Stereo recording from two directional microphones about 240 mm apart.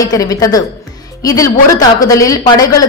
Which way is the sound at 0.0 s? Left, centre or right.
Centre.